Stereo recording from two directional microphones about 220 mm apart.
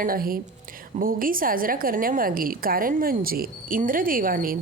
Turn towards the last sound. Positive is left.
turn(degrees=-40)  # may be behind; listen again after turning